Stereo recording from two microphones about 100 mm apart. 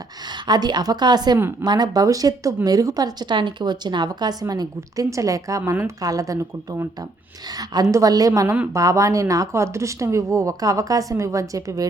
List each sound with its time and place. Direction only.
0.4 s a woman's voice: 45° right (ahead or behind)